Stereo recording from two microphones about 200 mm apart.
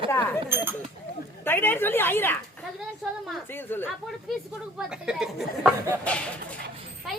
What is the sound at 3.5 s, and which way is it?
Speech, 10° left (ahead or behind).